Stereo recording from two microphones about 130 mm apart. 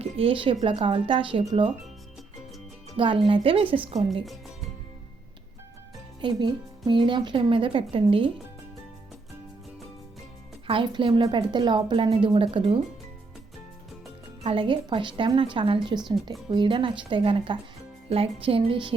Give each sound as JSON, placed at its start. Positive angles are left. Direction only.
{"t": 0.0, "sound": "a woman's voice", "side_deg": -45}
{"t": 3.0, "sound": "a woman's voice", "side_deg": -40}
{"t": 4.1, "sound": "music", "side_deg": 0}
{"t": 6.2, "sound": "speech", "side_deg": -35}
{"t": 10.7, "sound": "speech", "side_deg": -40}
{"t": 12.0, "sound": "a woman's voice", "side_deg": -50}
{"t": 14.4, "sound": "a woman's voice", "side_deg": -40}